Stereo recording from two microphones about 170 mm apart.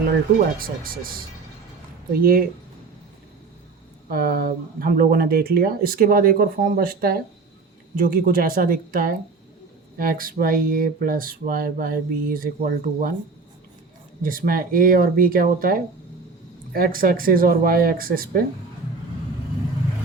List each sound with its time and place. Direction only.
0.6 s speech: 60° right (ahead or behind)
4.1 s speech: 60° right (ahead or behind)
14.2 s speech: 55° right (ahead or behind)